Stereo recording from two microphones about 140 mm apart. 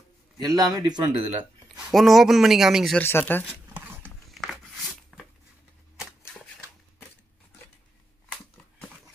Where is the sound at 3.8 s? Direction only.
15° right (ahead or behind).